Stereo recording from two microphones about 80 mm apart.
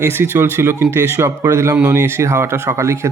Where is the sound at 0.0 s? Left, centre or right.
Right.